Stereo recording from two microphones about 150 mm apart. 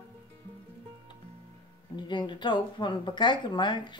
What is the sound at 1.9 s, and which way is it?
Speech, 30° left (ahead or behind).